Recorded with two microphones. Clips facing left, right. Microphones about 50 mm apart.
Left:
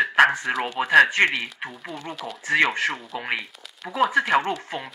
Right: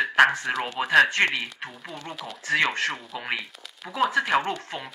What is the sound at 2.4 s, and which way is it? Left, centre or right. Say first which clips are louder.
Speech: left 3 dB; centre.